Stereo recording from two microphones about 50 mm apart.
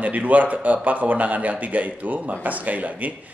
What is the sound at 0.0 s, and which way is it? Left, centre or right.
Speech, right.